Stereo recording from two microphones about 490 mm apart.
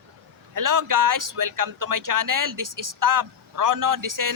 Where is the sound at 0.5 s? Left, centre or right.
Right.